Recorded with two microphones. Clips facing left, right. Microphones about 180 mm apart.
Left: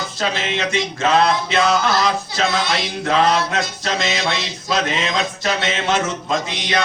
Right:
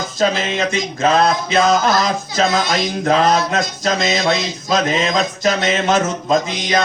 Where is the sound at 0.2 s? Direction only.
40° right (ahead or behind).